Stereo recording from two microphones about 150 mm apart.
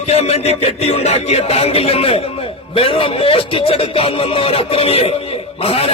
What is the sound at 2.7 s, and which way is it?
Speech, 35° left (ahead or behind).